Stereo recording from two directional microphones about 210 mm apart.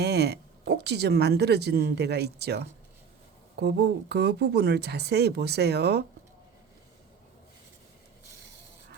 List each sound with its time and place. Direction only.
0.0 s speech: 50° right (ahead or behind)